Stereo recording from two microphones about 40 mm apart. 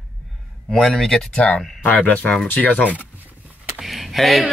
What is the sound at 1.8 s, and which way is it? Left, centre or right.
Speech, left.